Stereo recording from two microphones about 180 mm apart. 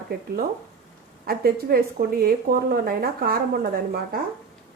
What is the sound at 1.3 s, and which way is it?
A woman's voice, 55° right (ahead or behind).